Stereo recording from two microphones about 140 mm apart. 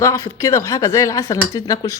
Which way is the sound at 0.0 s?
20° left (ahead or behind).